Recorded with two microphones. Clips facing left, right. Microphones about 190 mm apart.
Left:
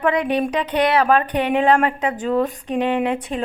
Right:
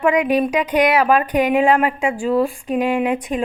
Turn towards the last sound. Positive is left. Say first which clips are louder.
# right 2 dB
turn(degrees=-15)  # may be behind; listen again after turning